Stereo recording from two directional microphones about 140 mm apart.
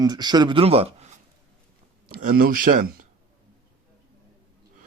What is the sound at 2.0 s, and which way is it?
Speech, 90° right.